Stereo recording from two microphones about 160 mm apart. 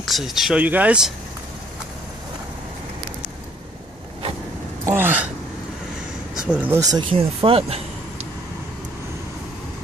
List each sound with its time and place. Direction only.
0.0 s speech: centre (ahead or behind)
4.8 s gasp: 15° right (ahead or behind)
6.3 s a sound: 5° right (ahead or behind)
6.8 s speech: 25° right (ahead or behind)